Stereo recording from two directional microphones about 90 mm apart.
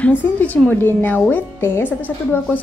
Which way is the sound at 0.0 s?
20° left (ahead or behind).